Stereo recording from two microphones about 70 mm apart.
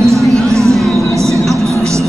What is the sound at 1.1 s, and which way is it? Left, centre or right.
Vehicle, right.